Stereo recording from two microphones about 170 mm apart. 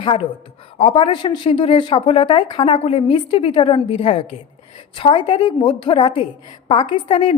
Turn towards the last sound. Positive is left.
turn(degrees=30)  # may be behind; listen again after turning